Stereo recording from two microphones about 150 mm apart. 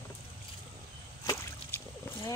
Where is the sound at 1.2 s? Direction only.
20° left (ahead or behind).